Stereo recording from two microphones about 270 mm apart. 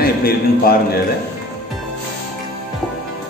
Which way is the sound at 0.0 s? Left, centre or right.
Left.